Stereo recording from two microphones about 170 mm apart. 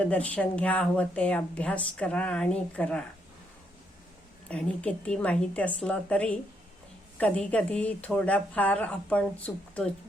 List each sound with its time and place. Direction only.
0.0 s speech: 5° left (ahead or behind)
4.4 s speech: 5° left (ahead or behind)